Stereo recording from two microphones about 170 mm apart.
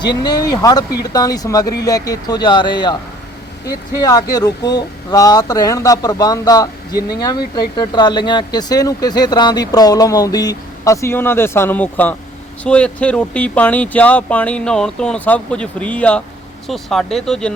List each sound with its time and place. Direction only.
0.0 s speech: 25° left (ahead or behind); by 17.5 s 5° left (ahead or behind)